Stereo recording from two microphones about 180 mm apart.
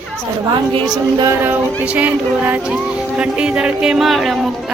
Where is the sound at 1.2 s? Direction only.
15° right (ahead or behind).